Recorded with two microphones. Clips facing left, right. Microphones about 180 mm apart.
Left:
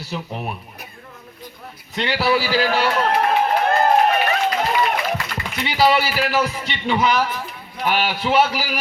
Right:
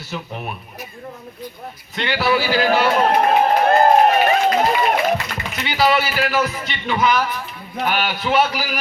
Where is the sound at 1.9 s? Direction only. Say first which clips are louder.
Even; 35° left (ahead or behind).